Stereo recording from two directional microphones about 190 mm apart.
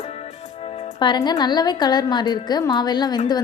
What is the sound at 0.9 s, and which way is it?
A woman's voice, 25° left (ahead or behind).